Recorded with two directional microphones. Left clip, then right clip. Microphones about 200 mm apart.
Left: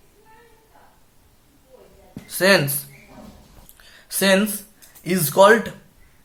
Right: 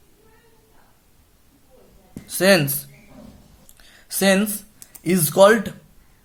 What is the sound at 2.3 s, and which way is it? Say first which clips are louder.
Speech: even; 40° right (ahead or behind).